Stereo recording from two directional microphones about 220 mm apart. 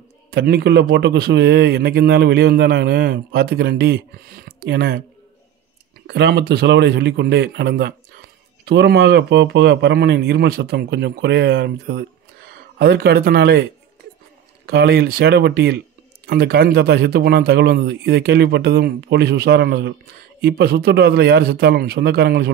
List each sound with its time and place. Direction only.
0.3 s a man's voice: 45° right (ahead or behind)
6.0 s a man's voice: 50° right (ahead or behind)
14.7 s a man's voice: 45° right (ahead or behind)